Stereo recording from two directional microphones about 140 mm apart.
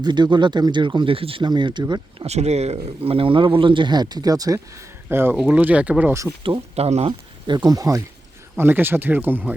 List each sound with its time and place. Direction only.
0.0 s speech: 30° right (ahead or behind)
2.2 s speech: 50° right (ahead or behind); by 4.6 s 25° right (ahead or behind)
5.0 s speech: 15° right (ahead or behind)
6.4 s speech: 40° right (ahead or behind)
7.1 s speech: 30° right (ahead or behind); by 9.6 s 10° right (ahead or behind)